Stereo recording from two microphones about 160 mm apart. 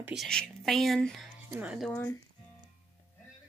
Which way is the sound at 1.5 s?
5° right (ahead or behind).